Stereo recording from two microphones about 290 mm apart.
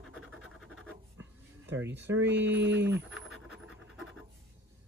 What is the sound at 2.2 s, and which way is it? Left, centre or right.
Speech, right.